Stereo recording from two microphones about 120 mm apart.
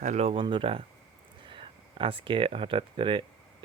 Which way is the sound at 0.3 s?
45° right (ahead or behind).